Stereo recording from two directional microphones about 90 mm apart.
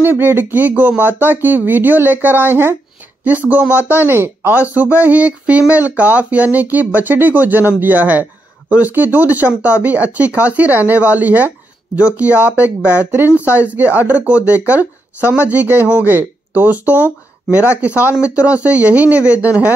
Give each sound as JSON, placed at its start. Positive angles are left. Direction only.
{"t": 0.0, "sound": "speech", "side_deg": -25}